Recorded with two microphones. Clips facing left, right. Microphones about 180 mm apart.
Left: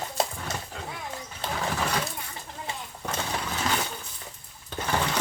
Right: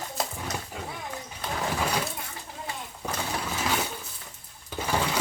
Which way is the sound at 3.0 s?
5° right (ahead or behind).